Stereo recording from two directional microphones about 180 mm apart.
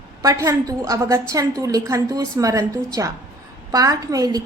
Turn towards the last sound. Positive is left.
turn(degrees=-20)  # may be behind; listen again after turning